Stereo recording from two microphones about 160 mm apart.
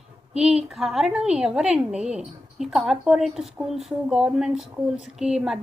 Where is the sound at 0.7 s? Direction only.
Centre (ahead or behind).